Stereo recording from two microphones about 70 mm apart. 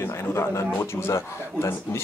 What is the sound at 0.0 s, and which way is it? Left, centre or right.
A man's voice, left.